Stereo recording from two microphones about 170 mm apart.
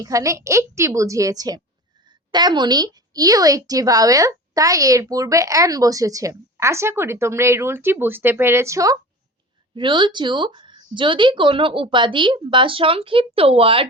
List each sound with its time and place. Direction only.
0.0 s a woman's voice: 20° right (ahead or behind)
9.7 s a woman's voice: 30° right (ahead or behind)